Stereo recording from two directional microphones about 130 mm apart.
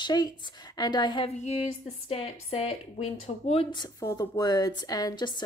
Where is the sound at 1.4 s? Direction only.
60° left (ahead or behind).